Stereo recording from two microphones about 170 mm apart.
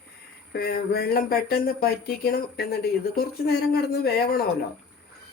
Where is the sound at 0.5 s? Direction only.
70° left (ahead or behind).